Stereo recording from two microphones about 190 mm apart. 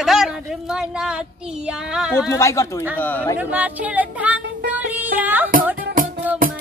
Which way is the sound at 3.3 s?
10° right (ahead or behind).